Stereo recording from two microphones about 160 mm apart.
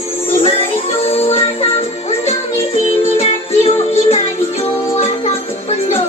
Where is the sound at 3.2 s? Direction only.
40° left (ahead or behind).